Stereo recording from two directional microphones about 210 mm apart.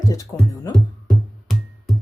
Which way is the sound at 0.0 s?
15° left (ahead or behind).